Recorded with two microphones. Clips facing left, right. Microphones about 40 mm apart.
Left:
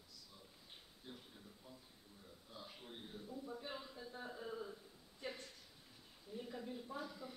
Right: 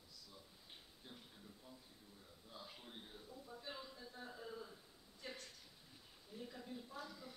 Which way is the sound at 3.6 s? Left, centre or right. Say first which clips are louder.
Left 3 dB; centre.